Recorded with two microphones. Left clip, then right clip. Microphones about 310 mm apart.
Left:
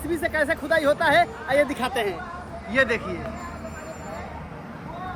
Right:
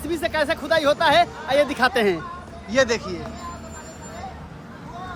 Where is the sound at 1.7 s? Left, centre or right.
Right.